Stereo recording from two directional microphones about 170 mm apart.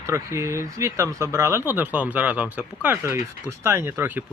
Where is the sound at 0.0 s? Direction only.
15° right (ahead or behind).